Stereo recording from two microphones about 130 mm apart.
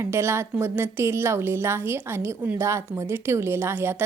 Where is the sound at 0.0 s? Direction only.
20° right (ahead or behind).